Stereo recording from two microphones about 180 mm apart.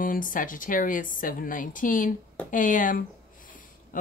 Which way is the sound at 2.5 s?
45° left (ahead or behind).